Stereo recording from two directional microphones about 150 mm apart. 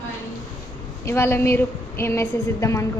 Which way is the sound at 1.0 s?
15° left (ahead or behind).